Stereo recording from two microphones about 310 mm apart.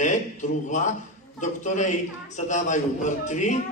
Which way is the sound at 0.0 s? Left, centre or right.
Left.